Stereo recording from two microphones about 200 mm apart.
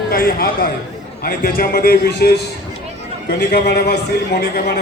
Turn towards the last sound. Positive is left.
turn(degrees=55)  # may be behind; listen again after turning